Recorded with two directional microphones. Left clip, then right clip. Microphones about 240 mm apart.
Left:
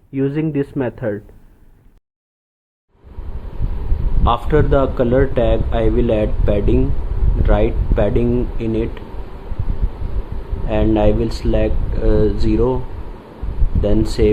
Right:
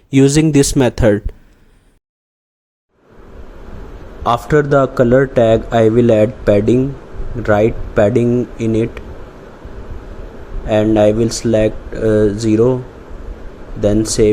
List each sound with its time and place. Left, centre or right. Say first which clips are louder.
0.1 s speech: right 9 dB; right
4.2 s a man's voice: right 3 dB; right
10.7 s speech: right 5 dB; centre
14.2 s speech: right 3 dB; centre